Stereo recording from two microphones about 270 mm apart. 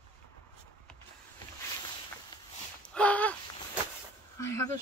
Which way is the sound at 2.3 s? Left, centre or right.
Centre.